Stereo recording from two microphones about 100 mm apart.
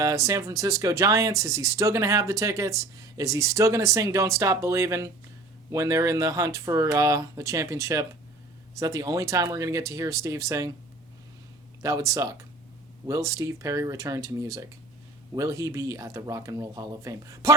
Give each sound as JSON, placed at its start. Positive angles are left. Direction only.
{"t": 0.0, "sound": "speech", "side_deg": -35}
{"t": 11.8, "sound": "speech", "side_deg": -30}